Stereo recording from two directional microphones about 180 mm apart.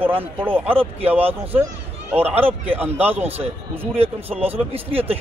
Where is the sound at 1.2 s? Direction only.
30° right (ahead or behind).